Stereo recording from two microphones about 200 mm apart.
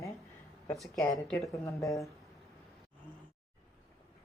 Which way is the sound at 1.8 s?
15° left (ahead or behind).